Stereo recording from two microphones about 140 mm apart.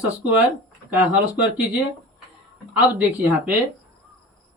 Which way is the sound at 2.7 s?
10° right (ahead or behind).